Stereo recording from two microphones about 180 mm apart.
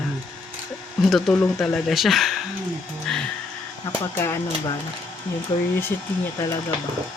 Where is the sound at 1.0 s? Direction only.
Centre (ahead or behind).